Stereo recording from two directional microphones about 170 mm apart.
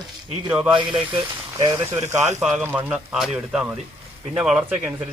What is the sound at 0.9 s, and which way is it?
Speech, 30° right (ahead or behind).